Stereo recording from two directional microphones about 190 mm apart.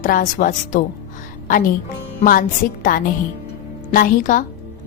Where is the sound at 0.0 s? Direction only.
45° left (ahead or behind).